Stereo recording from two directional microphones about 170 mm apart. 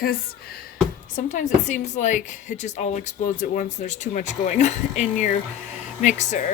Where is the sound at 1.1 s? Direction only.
50° left (ahead or behind).